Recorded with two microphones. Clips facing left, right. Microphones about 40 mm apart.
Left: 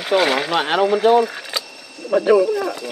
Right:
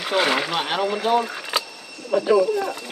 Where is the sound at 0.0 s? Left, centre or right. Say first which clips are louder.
Left 4 dB; centre.